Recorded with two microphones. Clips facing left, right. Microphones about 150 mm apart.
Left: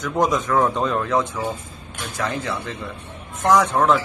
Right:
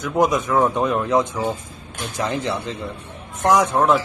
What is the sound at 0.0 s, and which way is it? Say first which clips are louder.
A man's voice: right 2 dB; 10° right (ahead or behind).